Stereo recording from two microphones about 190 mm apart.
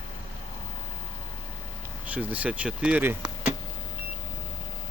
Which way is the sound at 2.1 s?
10° right (ahead or behind).